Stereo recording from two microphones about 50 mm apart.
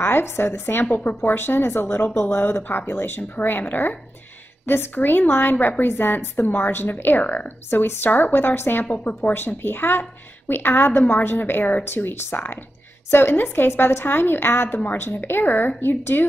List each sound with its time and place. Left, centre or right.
0.0 s speech: left
0.8 s a woman's voice: left